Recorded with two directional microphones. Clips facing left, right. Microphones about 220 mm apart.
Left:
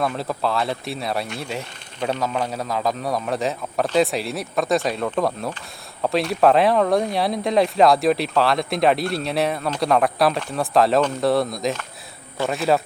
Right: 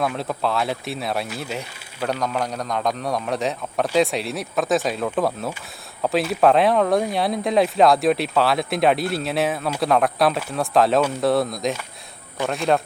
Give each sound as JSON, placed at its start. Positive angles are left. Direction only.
{"t": 0.0, "sound": "speech", "side_deg": 0}